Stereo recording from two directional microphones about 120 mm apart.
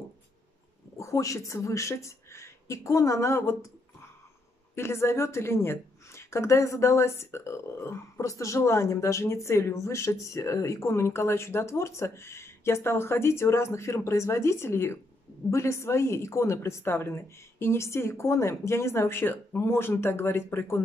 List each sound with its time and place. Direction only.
0.9 s a woman's voice: 25° left (ahead or behind)